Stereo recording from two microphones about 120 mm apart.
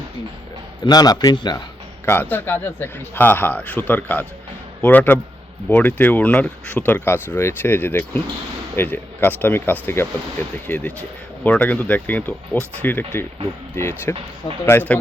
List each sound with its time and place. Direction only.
0.9 s a man's voice: 35° left (ahead or behind)
2.3 s speech: 20° left (ahead or behind)